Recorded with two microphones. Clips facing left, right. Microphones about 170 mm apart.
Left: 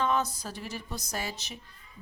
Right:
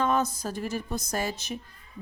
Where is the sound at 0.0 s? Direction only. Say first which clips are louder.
Right 3 dB; 45° right (ahead or behind).